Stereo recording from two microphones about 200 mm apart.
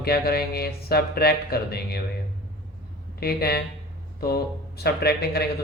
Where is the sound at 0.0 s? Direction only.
50° left (ahead or behind).